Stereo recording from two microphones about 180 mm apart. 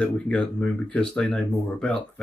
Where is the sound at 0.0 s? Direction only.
5° left (ahead or behind).